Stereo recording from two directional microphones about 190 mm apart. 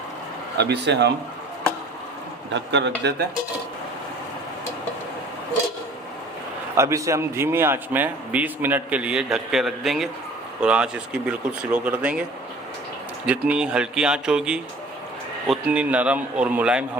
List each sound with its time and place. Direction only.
0.6 s a man's voice: 60° right (ahead or behind)
2.5 s a man's voice: 70° right (ahead or behind)
6.7 s a man's voice: 15° right (ahead or behind)
13.2 s a man's voice: 5° right (ahead or behind)